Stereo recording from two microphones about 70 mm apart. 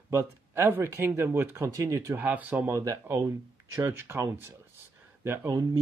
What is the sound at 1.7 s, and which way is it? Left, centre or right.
Speech, right.